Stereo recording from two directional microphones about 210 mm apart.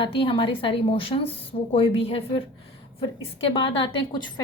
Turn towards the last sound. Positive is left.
turn(degrees=25)  # may be behind; listen again after turning